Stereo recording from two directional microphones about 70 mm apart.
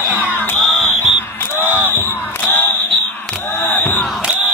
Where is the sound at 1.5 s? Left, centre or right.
Left.